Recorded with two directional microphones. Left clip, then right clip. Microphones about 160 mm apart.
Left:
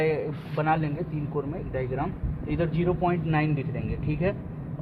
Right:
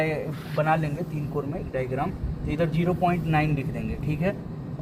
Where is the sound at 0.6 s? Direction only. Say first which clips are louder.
Right 2 dB; 35° left (ahead or behind).